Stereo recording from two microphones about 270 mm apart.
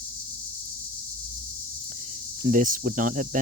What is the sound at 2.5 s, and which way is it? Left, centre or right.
Speech, right.